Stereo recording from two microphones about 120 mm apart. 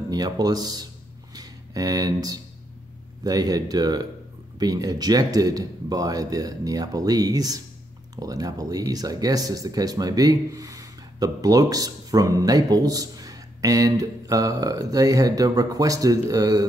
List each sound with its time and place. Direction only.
0.1 s speech: 35° right (ahead or behind)